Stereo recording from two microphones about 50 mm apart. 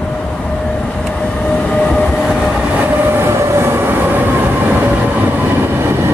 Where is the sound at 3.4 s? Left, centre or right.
Right.